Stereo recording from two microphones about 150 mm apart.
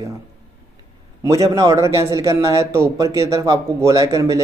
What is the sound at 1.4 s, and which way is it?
A man's voice, 30° right (ahead or behind).